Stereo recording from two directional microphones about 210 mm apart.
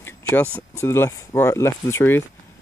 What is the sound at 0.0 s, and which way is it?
Speech, 10° left (ahead or behind).